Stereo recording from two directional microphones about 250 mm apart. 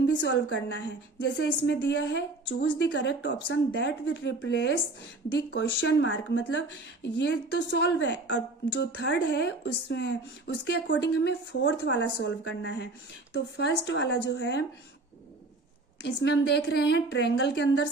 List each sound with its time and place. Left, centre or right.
0.0 s a woman's voice: left
16.0 s a woman's voice: left